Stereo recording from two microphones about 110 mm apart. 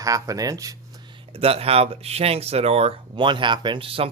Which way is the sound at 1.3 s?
65° right (ahead or behind).